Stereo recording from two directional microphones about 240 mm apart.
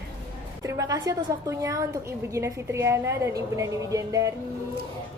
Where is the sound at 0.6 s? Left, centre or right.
Centre.